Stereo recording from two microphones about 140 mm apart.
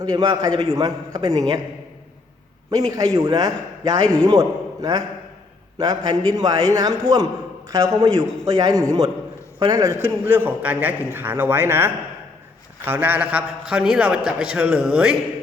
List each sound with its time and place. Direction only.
0.0 s a man's voice: 30° right (ahead or behind)
2.6 s a man's voice: 25° right (ahead or behind)
4.0 s a man's voice: 10° left (ahead or behind)
4.3 s a man's voice: 25° right (ahead or behind); by 15.1 s 5° right (ahead or behind)